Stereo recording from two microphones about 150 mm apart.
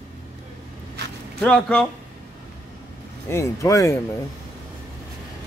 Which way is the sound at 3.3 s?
20° left (ahead or behind).